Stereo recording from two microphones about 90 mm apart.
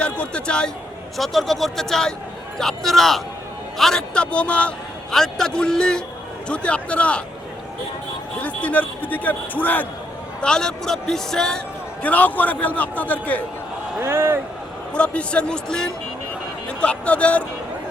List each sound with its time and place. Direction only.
0.0 s a man's voice: 10° left (ahead or behind)
8.4 s a man's voice: 15° left (ahead or behind)
12.0 s a man's voice: 15° left (ahead or behind)
14.0 s a man's voice: 30° right (ahead or behind)
14.9 s a man's voice: 10° left (ahead or behind)